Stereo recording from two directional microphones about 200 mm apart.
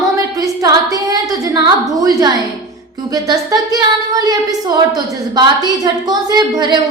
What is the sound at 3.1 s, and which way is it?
Speech, 20° right (ahead or behind).